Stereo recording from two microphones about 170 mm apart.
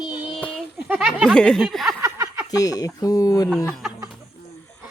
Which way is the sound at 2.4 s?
20° left (ahead or behind).